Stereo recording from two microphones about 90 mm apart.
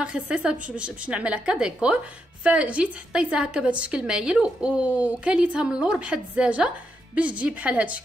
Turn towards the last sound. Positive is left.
turn(degrees=-15)  # may be behind; listen again after turning